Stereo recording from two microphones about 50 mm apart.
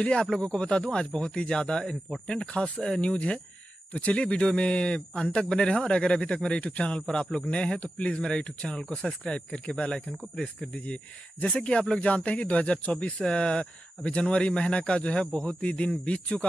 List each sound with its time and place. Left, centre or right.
0.0 s a man's voice: centre